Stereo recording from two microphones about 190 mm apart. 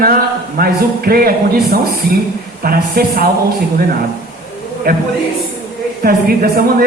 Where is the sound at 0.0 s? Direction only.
50° right (ahead or behind).